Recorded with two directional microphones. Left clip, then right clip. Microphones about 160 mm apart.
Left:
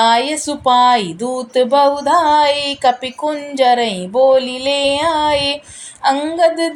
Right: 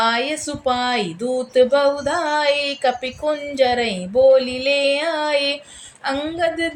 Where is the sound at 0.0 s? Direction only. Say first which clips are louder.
Left 6 dB; 25° left (ahead or behind).